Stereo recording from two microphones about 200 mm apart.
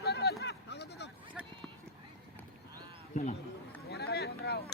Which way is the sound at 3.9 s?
55° left (ahead or behind).